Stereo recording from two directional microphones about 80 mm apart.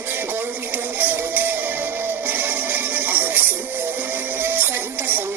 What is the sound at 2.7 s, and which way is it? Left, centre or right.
Music, right.